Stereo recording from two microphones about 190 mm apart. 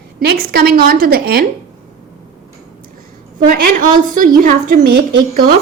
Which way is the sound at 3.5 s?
45° right (ahead or behind).